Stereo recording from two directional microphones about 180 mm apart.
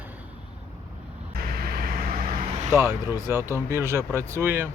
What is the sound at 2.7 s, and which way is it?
Speech, 15° right (ahead or behind).